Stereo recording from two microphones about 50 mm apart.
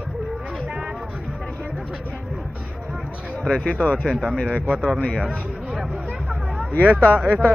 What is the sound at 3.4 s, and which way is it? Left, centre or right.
Speech, centre.